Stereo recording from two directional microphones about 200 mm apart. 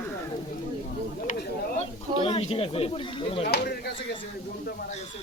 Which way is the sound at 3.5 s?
55° left (ahead or behind).